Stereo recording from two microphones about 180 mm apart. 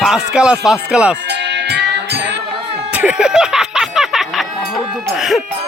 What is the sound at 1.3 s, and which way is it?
Music, 70° right (ahead or behind).